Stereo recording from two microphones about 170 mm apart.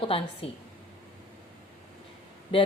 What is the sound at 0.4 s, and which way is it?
Speech, 35° left (ahead or behind).